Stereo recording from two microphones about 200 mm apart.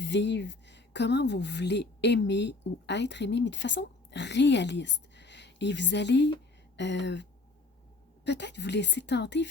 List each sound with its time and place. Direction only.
0.0 s a woman's voice: 60° left (ahead or behind)